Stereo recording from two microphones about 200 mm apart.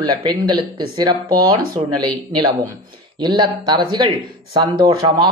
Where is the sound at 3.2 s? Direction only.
20° right (ahead or behind).